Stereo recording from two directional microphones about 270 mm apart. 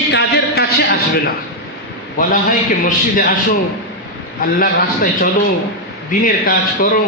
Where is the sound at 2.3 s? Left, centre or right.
Left.